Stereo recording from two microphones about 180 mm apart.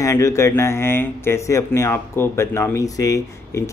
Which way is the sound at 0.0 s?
15° left (ahead or behind).